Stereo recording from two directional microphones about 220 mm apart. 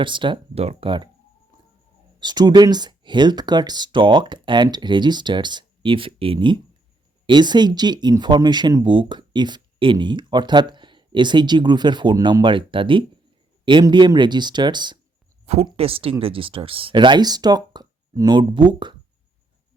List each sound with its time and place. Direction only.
0.0 s speech: 20° right (ahead or behind)
2.1 s speech: 20° right (ahead or behind)